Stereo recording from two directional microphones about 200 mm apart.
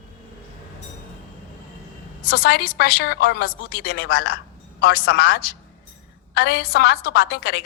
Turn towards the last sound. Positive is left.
turn(degrees=50)  # may be behind; listen again after turning